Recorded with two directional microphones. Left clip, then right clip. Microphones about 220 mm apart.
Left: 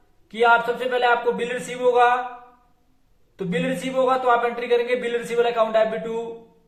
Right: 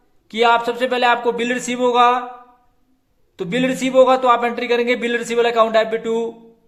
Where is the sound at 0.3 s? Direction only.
45° right (ahead or behind).